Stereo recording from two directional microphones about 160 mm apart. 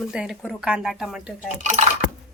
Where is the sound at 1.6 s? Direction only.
45° right (ahead or behind).